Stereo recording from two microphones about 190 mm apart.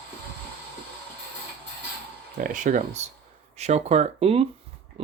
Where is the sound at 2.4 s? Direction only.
45° right (ahead or behind).